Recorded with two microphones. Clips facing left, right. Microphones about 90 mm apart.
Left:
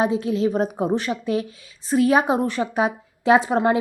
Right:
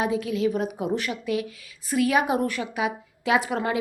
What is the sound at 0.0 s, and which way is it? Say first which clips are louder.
A woman's voice: left 4 dB; 30° left (ahead or behind).